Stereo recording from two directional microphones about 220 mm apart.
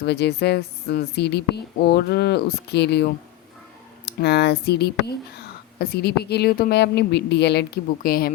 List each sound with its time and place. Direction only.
0.0 s a woman's voice: 50° left (ahead or behind)